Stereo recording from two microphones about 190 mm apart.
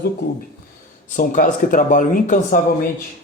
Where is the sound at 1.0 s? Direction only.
45° left (ahead or behind).